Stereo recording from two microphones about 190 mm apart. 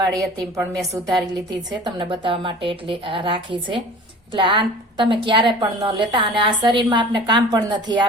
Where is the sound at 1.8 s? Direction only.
25° right (ahead or behind).